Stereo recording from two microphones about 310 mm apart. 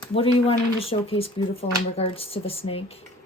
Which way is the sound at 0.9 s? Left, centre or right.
Centre.